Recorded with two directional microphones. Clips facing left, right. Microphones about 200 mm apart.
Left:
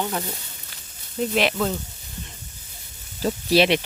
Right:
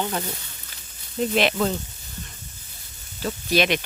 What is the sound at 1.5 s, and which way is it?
Speech, 5° right (ahead or behind).